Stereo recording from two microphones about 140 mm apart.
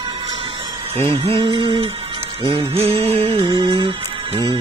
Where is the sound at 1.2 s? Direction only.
35° right (ahead or behind).